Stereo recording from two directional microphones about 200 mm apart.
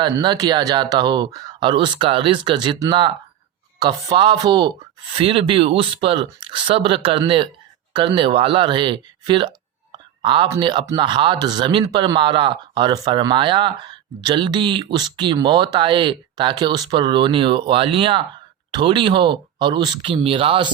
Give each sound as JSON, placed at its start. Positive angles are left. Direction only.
{"t": 0.0, "sound": "speech", "side_deg": -20}